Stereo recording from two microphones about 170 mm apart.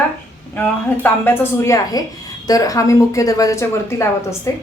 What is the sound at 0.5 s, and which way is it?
A woman's voice, 10° left (ahead or behind).